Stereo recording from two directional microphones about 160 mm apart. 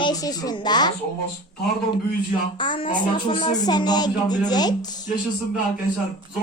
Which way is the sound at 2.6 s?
30° left (ahead or behind).